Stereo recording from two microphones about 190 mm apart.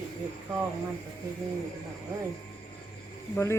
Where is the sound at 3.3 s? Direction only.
15° left (ahead or behind).